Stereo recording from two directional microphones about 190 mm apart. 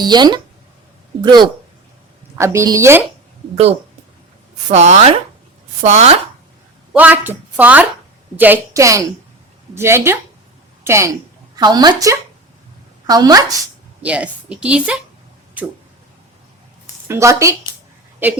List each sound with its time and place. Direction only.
0.0 s a woman's voice: 20° right (ahead or behind)
4.7 s speech: 35° right (ahead or behind)
6.9 s a woman's voice: 10° right (ahead or behind)
14.0 s a woman's voice: 5° right (ahead or behind)
17.1 s a woman's voice: 15° right (ahead or behind)